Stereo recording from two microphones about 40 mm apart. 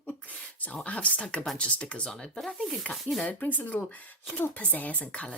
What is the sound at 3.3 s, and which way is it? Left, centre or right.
Speech, left.